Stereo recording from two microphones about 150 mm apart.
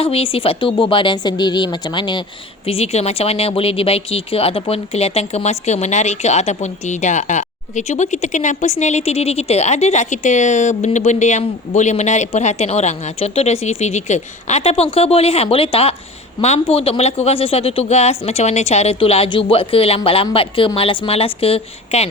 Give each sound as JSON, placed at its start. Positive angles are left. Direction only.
{"t": 0.0, "sound": "speech", "side_deg": 40}
{"t": 2.6, "sound": "speech", "side_deg": 45}